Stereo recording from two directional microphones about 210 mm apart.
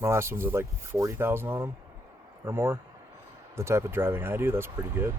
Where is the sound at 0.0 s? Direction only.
10° right (ahead or behind).